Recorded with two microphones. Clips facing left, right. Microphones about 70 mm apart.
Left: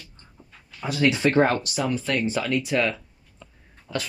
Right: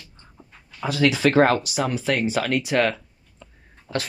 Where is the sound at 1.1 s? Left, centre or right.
Right.